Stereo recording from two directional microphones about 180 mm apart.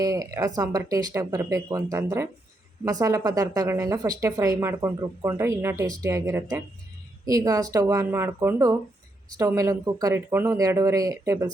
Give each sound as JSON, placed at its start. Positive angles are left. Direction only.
{"t": 0.0, "sound": "a woman's voice", "side_deg": -20}